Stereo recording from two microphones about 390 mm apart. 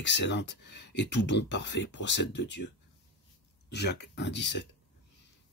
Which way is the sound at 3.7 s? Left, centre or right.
Left.